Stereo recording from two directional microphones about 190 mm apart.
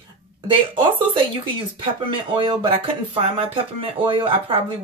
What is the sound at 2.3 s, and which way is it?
Speech, 25° right (ahead or behind).